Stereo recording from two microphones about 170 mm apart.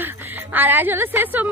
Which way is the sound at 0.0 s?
10° right (ahead or behind).